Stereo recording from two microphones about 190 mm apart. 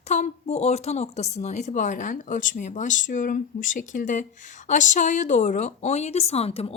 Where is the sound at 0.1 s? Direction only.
35° left (ahead or behind).